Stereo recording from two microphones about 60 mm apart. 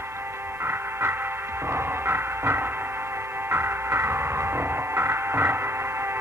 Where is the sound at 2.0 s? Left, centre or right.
Right.